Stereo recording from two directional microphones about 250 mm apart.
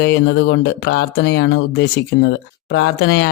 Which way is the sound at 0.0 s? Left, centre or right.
Left.